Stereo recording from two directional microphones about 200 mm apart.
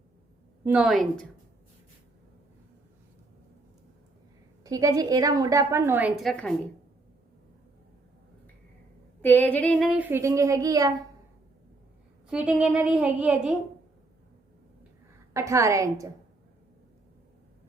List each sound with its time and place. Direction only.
0.6 s speech: 5° right (ahead or behind)
4.6 s a woman's voice: 15° right (ahead or behind); by 6.5 s 5° left (ahead or behind)
9.2 s a woman's voice: 10° left (ahead or behind); by 11.0 s 20° right (ahead or behind)
12.3 s speech: 5° right (ahead or behind)
15.3 s a woman's voice: 15° right (ahead or behind)